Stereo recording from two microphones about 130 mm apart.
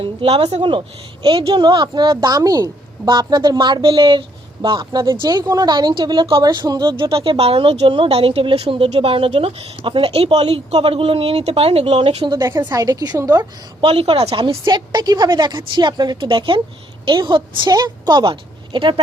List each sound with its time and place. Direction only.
0.0 s speech: 50° right (ahead or behind)
0.6 s a woman's voice: 40° right (ahead or behind); by 13.5 s 25° right (ahead or behind)
13.8 s speech: 45° right (ahead or behind)
14.4 s speech: 35° right (ahead or behind)